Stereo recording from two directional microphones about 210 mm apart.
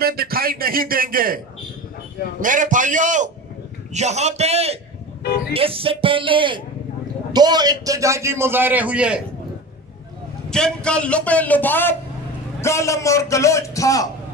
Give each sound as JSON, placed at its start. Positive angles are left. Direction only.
{"t": 0.0, "sound": "a man's voice", "side_deg": -45}
{"t": 2.4, "sound": "a man's voice", "side_deg": -40}
{"t": 10.5, "sound": "a man's voice", "side_deg": 5}